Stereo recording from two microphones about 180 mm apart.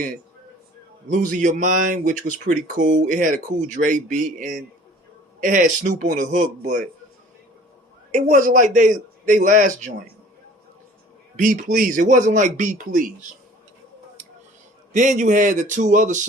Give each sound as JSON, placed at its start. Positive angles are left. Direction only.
{"t": 1.1, "sound": "speech", "side_deg": -45}
{"t": 8.1, "sound": "speech", "side_deg": -45}
{"t": 11.3, "sound": "speech", "side_deg": -45}
{"t": 14.9, "sound": "speech", "side_deg": -45}